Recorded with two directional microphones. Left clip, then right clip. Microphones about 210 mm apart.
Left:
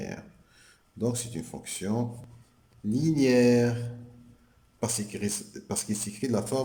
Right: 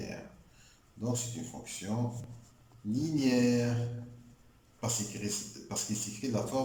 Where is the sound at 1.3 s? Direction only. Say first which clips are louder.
Left 5 dB; 50° left (ahead or behind).